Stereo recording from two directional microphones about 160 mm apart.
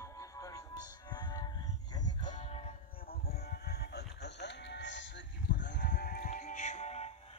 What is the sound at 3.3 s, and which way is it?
Music, 75° left (ahead or behind).